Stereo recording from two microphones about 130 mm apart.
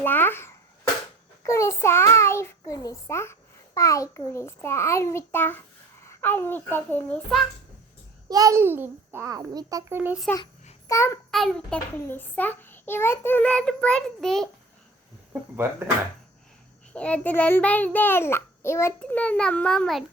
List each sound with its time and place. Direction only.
0.0 s a child's voice: 15° left (ahead or behind)
8.3 s a child's voice: 25° right (ahead or behind)
9.9 s a child's voice: 15° right (ahead or behind)
10.8 s a child's voice: 20° left (ahead or behind)
11.3 s a child's voice: 5° left (ahead or behind)
12.0 s child singing: 15° left (ahead or behind)
16.9 s child singing: 10° left (ahead or behind)
19.2 s child singing: 10° left (ahead or behind)